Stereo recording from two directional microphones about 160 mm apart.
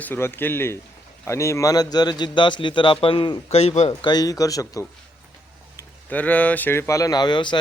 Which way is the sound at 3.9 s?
30° left (ahead or behind).